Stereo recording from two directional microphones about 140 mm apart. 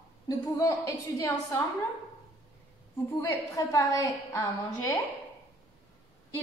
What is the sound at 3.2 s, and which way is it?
A woman's voice, 20° left (ahead or behind).